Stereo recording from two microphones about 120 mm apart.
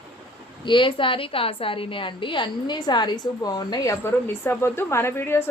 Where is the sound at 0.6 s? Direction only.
45° left (ahead or behind).